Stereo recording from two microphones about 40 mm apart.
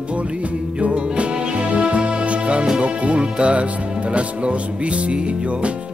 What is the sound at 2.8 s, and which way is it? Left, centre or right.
Speech, right.